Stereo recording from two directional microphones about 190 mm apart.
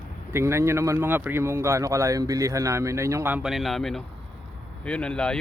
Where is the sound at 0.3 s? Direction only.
15° right (ahead or behind).